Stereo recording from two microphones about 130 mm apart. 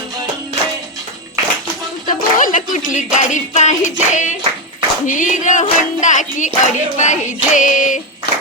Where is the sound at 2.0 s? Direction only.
90° left; by 4.3 s 70° left (ahead or behind).